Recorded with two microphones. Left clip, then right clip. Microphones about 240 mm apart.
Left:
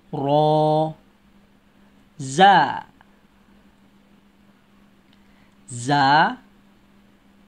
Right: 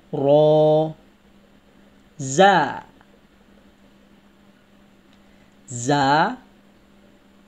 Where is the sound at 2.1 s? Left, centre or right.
Centre.